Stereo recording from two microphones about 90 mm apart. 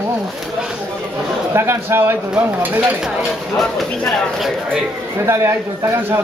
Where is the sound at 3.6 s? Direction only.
Centre (ahead or behind).